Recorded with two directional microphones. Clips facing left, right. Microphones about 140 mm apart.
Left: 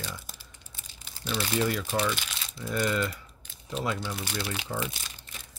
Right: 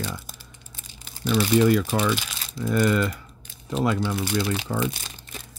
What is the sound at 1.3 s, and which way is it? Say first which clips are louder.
Speech: right 9 dB; 65° right (ahead or behind).